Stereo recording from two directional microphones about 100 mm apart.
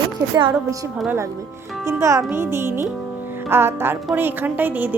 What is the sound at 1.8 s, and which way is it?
A child's voice, 30° right (ahead or behind).